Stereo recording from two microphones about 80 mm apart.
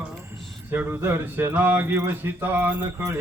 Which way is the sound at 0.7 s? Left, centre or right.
Right.